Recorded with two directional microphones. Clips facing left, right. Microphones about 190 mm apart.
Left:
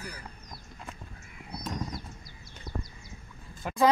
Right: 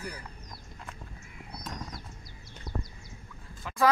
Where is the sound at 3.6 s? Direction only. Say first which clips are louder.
Left 6 dB; 50° left (ahead or behind).